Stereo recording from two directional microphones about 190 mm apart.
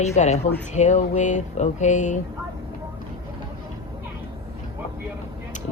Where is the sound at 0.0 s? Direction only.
35° left (ahead or behind).